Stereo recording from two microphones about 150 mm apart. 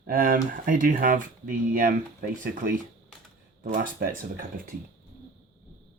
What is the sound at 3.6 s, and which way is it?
Speech, 65° right (ahead or behind).